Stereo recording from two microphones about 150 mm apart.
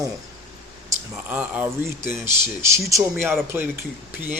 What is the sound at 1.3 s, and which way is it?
Speech, 10° right (ahead or behind).